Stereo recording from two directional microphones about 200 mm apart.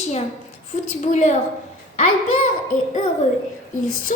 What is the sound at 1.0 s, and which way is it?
Speech, 40° left (ahead or behind).